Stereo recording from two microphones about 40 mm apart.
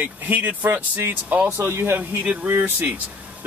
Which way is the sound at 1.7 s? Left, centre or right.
Right.